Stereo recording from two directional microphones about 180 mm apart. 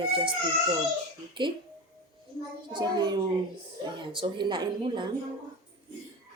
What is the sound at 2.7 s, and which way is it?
A woman's voice, 25° right (ahead or behind).